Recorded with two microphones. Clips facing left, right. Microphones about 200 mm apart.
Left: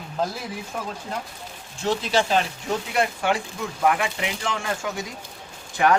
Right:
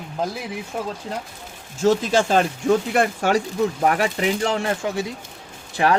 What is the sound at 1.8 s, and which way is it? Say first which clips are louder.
Speech: right 5 dB; 45° right (ahead or behind).